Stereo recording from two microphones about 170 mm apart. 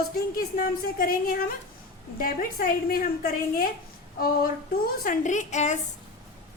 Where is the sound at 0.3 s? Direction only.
60° left (ahead or behind).